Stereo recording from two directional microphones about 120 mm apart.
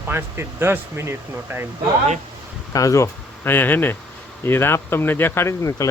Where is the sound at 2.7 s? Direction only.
25° left (ahead or behind).